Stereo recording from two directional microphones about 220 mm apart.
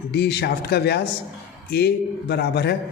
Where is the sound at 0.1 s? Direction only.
50° left (ahead or behind).